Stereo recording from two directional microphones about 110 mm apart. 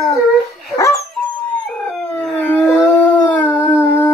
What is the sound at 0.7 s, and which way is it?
Dog, 30° left (ahead or behind).